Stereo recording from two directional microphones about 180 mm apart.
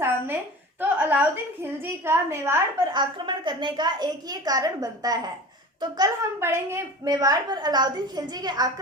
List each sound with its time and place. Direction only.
0.8 s a woman's voice: 10° right (ahead or behind)
3.0 s a woman's voice: 25° right (ahead or behind)